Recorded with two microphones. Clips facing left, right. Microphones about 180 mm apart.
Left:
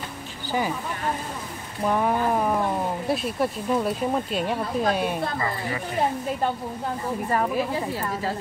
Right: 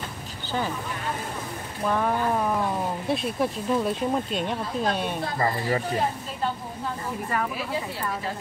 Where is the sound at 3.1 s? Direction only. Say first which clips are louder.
Even; centre (ahead or behind).